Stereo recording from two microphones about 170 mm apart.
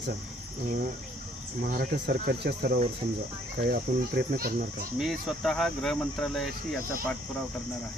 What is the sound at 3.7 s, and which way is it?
A child's voice, 60° right (ahead or behind).